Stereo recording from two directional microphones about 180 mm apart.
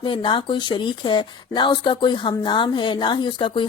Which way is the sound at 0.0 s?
25° left (ahead or behind).